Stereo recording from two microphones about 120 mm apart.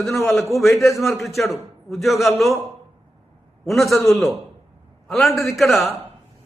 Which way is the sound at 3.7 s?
Centre (ahead or behind).